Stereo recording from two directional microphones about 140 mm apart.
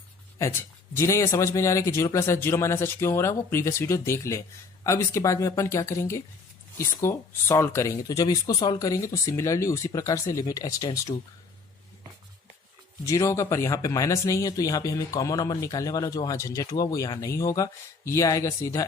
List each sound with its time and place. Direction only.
0.3 s speech: 20° left (ahead or behind)
13.1 s speech: 20° left (ahead or behind)